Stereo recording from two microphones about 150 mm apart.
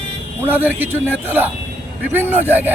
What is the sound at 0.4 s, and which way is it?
Speech, 10° right (ahead or behind).